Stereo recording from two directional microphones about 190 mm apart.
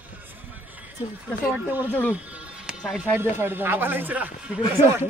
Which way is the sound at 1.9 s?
10° left (ahead or behind).